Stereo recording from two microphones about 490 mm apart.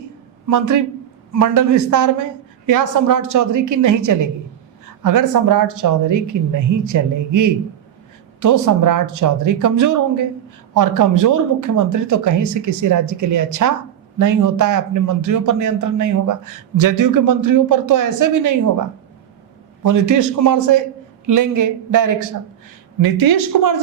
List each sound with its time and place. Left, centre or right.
0.4 s a man's voice: right